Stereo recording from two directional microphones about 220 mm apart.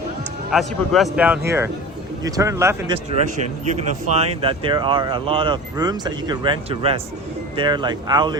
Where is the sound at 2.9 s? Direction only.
30° right (ahead or behind).